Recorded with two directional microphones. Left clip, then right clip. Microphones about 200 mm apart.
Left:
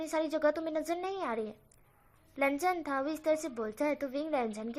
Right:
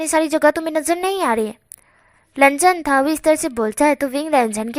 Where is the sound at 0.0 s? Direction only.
35° right (ahead or behind).